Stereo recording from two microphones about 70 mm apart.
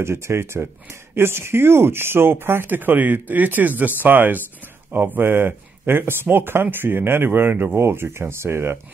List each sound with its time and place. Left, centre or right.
0.0 s speech: right